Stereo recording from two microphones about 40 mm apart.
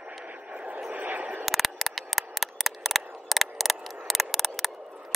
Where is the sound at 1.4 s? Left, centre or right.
Centre.